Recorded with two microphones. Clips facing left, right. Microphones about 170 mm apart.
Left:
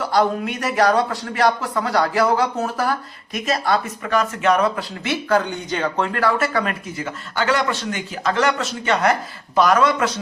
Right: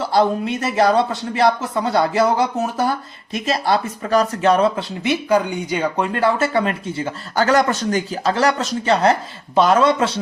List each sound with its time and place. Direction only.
0.0 s speech: 25° right (ahead or behind); by 6.1 s 10° right (ahead or behind)
6.1 s speech: 25° right (ahead or behind)
7.3 s speech: 40° right (ahead or behind)